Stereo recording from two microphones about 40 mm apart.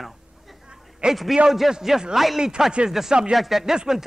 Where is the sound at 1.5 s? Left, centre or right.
Centre.